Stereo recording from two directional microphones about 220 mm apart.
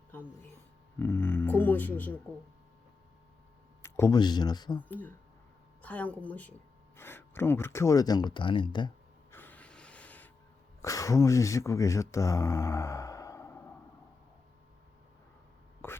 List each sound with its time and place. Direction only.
0.9 s speech: 10° left (ahead or behind)
3.8 s speech: 10° left (ahead or behind)
4.9 s speech: 10° left (ahead or behind)
9.3 s a sound: 10° left (ahead or behind)
10.8 s speech: 15° left (ahead or behind)
15.8 s speech: 10° left (ahead or behind)